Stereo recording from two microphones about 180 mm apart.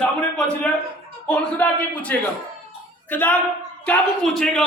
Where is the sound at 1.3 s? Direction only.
10° left (ahead or behind).